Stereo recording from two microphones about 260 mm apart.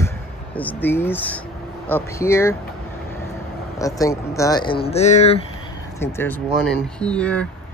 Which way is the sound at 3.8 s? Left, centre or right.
Centre.